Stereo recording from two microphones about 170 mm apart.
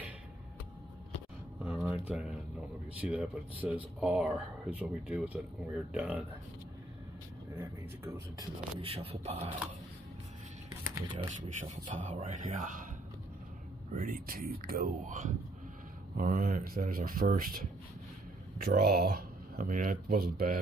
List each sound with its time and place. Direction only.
1.6 s a sound: 5° right (ahead or behind)
3.0 s speech: 10° right (ahead or behind)
8.8 s speech: 35° right (ahead or behind)
11.0 s speech: 25° right (ahead or behind)
11.7 s speech: 45° right (ahead or behind)
13.9 s speech: 55° right (ahead or behind)